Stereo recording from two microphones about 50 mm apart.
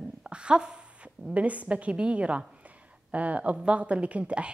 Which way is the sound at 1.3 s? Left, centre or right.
Right.